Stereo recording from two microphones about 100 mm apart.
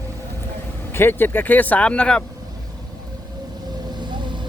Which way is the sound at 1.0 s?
20° left (ahead or behind).